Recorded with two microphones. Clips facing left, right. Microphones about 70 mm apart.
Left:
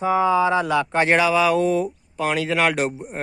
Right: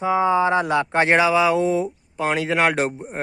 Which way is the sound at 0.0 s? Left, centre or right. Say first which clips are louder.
Even; right.